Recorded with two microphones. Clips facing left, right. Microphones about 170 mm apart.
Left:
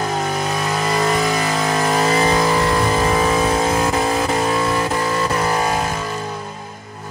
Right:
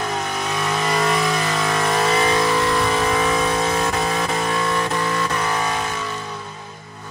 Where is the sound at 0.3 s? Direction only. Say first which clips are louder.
Left 3 dB; 40° left (ahead or behind).